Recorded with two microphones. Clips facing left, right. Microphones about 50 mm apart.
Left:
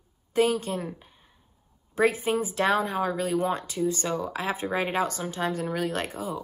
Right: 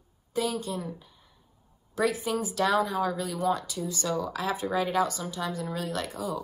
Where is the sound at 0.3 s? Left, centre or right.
Left.